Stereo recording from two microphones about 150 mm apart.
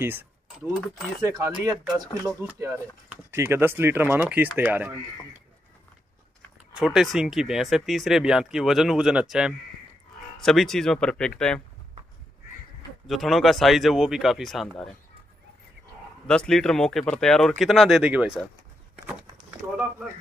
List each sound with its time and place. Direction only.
0.0 s speech: 15° right (ahead or behind)
6.7 s speech: 5° right (ahead or behind)
13.0 s speech: centre (ahead or behind)
16.3 s speech: 5° left (ahead or behind)